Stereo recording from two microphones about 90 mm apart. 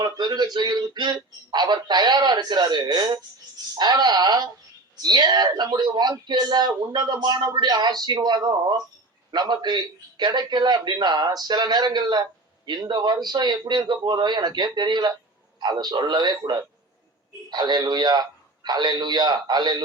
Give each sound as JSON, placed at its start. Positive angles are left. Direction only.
{"t": 0.2, "sound": "a man's voice", "side_deg": -55}